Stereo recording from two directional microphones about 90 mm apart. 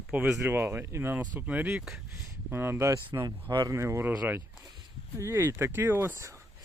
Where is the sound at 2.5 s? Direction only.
25° right (ahead or behind).